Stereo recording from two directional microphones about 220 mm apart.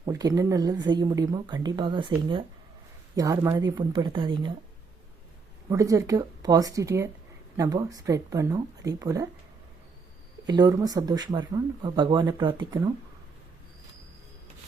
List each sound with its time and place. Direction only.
0.0 s speech: 15° right (ahead or behind)
3.2 s speech: 15° right (ahead or behind)
5.6 s speech: 15° right (ahead or behind)
10.4 s speech: 20° right (ahead or behind)